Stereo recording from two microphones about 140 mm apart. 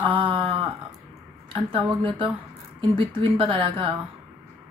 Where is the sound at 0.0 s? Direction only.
35° right (ahead or behind).